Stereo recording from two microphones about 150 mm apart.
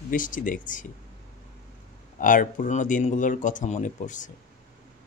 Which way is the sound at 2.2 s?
60° left (ahead or behind).